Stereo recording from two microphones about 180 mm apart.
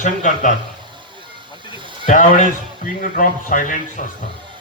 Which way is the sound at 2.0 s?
45° left (ahead or behind).